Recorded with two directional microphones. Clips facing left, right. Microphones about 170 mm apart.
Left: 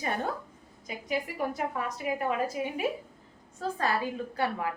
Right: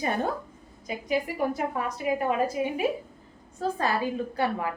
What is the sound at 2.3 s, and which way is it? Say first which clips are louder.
A woman's voice: right 4 dB; 20° right (ahead or behind).